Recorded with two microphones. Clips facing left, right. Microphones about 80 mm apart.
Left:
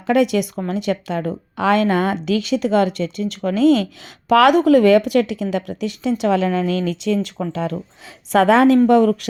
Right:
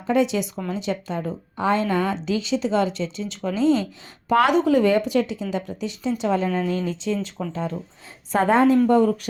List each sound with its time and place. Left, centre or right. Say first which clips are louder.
0.1 s a woman's voice: left 4 dB; left
7.5 s a woman's voice: left 4 dB; left